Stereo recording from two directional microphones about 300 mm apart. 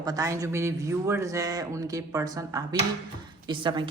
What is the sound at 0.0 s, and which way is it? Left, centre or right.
A woman's voice, centre.